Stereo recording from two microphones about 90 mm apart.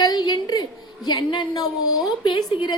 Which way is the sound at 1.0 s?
55° left (ahead or behind).